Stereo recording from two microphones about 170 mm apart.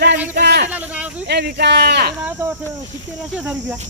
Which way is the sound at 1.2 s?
75° right (ahead or behind).